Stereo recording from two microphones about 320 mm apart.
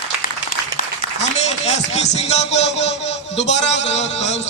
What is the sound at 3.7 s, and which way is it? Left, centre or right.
Speech, left.